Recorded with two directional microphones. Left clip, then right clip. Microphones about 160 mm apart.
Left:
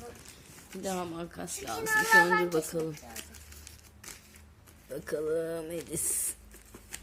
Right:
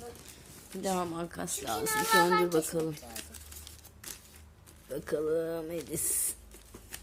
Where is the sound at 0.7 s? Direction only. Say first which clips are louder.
Right 3 dB; 5° right (ahead or behind).